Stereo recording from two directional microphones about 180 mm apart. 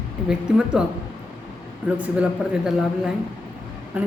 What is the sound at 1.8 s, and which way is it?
A woman's voice, 10° right (ahead or behind).